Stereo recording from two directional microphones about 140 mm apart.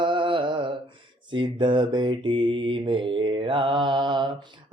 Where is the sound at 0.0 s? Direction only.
35° right (ahead or behind).